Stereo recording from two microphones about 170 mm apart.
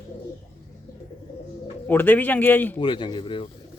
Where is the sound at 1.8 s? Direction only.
10° left (ahead or behind).